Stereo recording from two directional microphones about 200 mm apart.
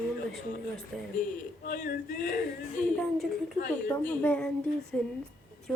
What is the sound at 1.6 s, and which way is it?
Speech, 45° left (ahead or behind).